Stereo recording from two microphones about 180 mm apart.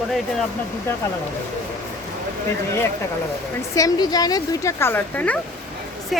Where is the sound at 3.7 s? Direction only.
20° left (ahead or behind).